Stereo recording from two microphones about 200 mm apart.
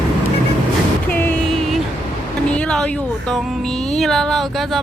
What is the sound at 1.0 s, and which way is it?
Music, 10° left (ahead or behind).